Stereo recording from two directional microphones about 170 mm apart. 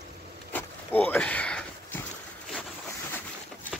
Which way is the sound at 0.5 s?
10° left (ahead or behind).